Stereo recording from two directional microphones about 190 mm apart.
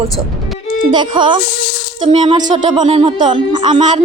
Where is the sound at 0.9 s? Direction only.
25° right (ahead or behind).